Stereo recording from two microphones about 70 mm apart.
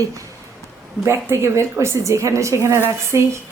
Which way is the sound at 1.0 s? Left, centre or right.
Right.